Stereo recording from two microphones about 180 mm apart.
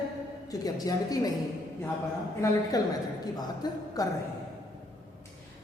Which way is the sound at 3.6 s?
20° left (ahead or behind).